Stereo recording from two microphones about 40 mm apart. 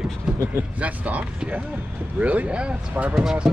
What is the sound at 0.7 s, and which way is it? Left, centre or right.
Speech, right.